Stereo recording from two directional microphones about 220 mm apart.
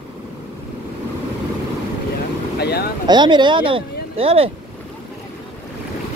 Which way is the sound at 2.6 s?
45° left (ahead or behind).